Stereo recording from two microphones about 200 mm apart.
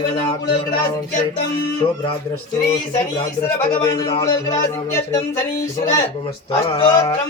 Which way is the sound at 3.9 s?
25° left (ahead or behind).